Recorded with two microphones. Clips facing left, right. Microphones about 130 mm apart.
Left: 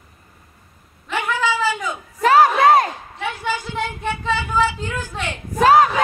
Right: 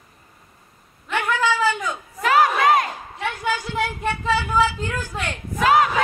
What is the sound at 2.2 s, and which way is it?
Crowd, 35° left (ahead or behind).